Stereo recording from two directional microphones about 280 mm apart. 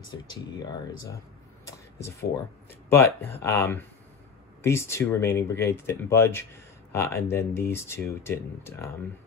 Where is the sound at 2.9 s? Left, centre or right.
Centre.